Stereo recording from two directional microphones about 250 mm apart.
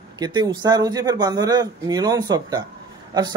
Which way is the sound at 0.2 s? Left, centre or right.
Centre.